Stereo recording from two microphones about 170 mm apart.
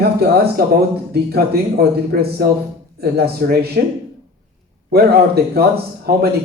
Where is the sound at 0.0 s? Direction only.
65° right (ahead or behind).